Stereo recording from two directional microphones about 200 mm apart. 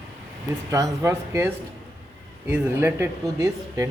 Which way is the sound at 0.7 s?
15° right (ahead or behind).